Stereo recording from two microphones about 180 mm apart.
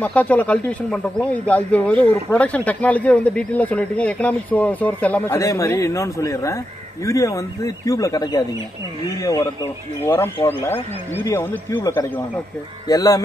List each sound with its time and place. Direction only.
0.0 s speech: 10° left (ahead or behind)